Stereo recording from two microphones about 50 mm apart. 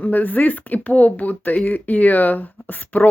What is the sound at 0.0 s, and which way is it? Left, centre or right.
Speech, left.